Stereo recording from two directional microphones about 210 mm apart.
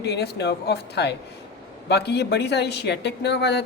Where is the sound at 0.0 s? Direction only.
50° left (ahead or behind).